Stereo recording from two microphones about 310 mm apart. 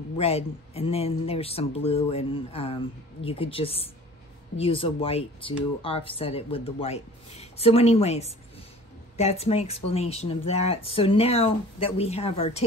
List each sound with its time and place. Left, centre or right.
0.2 s speech: centre